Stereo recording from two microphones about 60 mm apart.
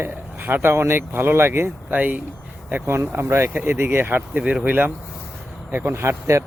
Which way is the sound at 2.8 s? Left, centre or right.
Right.